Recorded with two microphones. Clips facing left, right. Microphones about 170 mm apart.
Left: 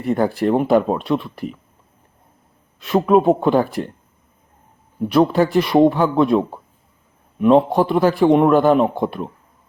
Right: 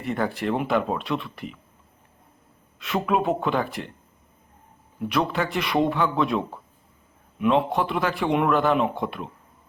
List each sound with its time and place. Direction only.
0.0 s a man's voice: 40° left (ahead or behind)
2.7 s a man's voice: 35° left (ahead or behind)
5.0 s a man's voice: 35° left (ahead or behind)